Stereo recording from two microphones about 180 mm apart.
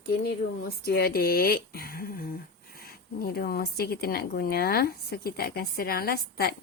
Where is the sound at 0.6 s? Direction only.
60° left (ahead or behind).